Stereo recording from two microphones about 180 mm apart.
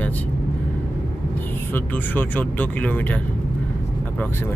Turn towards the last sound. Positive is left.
turn(degrees=10)  # may be behind; listen again after turning